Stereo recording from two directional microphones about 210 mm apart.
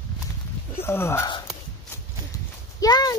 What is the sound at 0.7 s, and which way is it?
Speech, 10° left (ahead or behind).